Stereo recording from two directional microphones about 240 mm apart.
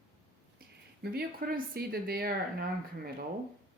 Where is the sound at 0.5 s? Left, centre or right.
Right.